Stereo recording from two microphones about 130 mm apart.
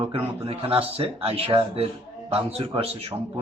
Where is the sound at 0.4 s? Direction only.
45° right (ahead or behind).